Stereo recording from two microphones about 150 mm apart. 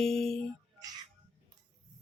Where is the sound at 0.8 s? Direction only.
25° right (ahead or behind).